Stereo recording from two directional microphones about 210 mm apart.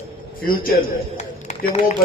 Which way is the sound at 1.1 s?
30° left (ahead or behind).